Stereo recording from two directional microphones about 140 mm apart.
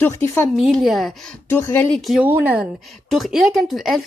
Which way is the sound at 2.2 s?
10° right (ahead or behind).